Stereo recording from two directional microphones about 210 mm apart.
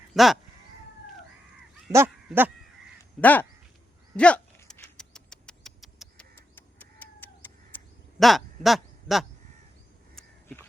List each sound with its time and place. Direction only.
0.1 s speech: centre (ahead or behind)
1.9 s a sound: 10° right (ahead or behind)
3.0 s crow: 10° left (ahead or behind)
4.2 s rodents: 5° left (ahead or behind)
6.3 s bird: 10° left (ahead or behind)
7.7 s crow: 10° left (ahead or behind)
8.2 s speech: centre (ahead or behind)
10.2 s crow: 10° left (ahead or behind)